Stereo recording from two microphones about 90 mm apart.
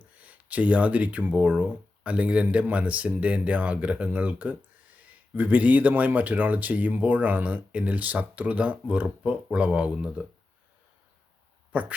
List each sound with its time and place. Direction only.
0.2 s speech: 15° right (ahead or behind)
11.7 s speech: 15° right (ahead or behind)